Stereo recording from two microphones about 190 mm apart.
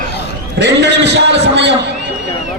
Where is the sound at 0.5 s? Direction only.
65° right (ahead or behind).